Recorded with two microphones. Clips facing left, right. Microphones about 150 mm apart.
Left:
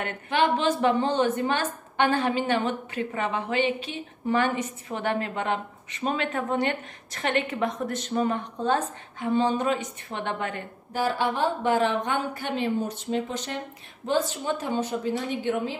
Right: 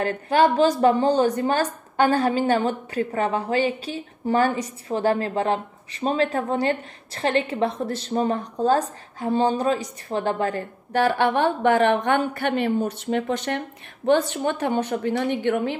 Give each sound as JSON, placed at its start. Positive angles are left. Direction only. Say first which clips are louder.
{"t": 0.0, "sound": "a woman's voice", "louder": "right 6 dB", "side_deg": -40}
{"t": 10.9, "sound": "a woman's voice", "louder": "right 6 dB", "side_deg": -65}